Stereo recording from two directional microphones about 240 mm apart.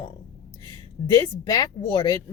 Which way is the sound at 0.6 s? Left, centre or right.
Centre.